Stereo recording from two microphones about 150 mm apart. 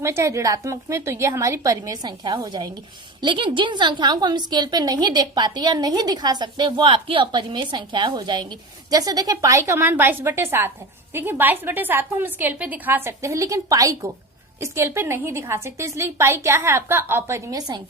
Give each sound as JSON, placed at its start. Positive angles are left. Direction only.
{"t": 0.0, "sound": "a woman's voice", "side_deg": -20}